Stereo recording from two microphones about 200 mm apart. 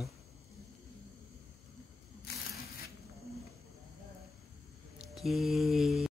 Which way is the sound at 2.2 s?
50° left (ahead or behind).